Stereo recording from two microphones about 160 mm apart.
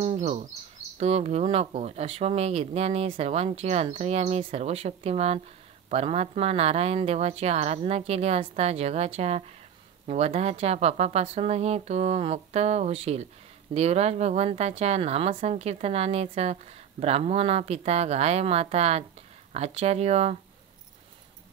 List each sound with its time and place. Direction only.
0.0 s bird: 40° right (ahead or behind)
0.9 s speech: 40° right (ahead or behind)